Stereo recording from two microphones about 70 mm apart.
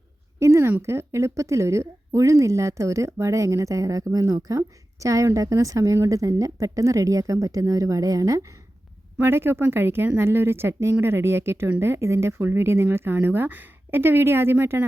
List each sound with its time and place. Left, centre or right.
0.3 s a sound: right
0.8 s a woman's voice: right
9.2 s speech: right